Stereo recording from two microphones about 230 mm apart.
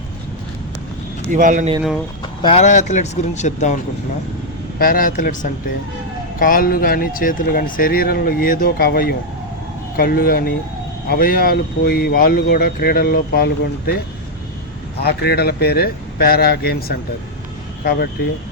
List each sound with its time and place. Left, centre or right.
1.3 s a man's voice: right
2.2 s speech: left
4.8 s speech: left